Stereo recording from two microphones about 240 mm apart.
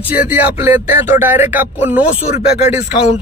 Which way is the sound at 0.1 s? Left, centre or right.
Centre.